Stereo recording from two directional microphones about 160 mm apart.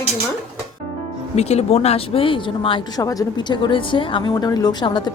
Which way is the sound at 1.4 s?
40° left (ahead or behind).